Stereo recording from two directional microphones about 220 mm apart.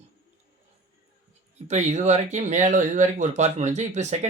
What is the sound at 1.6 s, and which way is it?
Speech, 30° right (ahead or behind).